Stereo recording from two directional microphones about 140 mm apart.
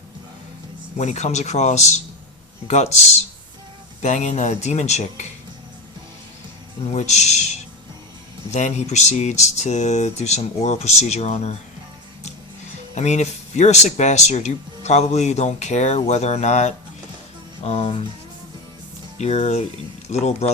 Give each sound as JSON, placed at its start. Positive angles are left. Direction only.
{"t": 0.9, "sound": "speech", "side_deg": 55}
{"t": 4.0, "sound": "speech", "side_deg": 55}
{"t": 6.9, "sound": "speech", "side_deg": 50}
{"t": 12.9, "sound": "speech", "side_deg": 55}
{"t": 19.2, "sound": "speech", "side_deg": 50}